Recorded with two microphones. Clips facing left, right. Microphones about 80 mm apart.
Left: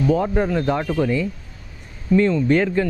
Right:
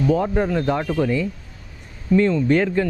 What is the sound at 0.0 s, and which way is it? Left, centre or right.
Speech, centre.